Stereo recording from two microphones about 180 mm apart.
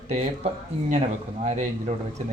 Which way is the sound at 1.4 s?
40° right (ahead or behind).